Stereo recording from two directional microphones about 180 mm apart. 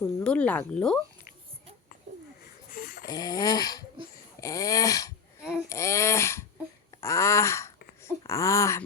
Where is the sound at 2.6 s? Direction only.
50° left (ahead or behind).